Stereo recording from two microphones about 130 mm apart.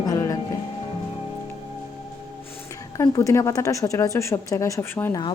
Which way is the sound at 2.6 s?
25° left (ahead or behind).